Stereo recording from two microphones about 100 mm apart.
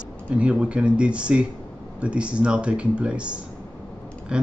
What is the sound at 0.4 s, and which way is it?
Speech, 10° right (ahead or behind).